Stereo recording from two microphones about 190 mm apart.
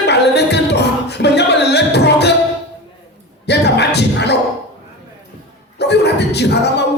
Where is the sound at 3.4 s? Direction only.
60° left (ahead or behind).